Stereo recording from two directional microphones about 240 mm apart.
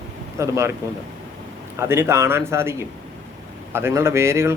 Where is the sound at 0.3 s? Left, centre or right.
Centre.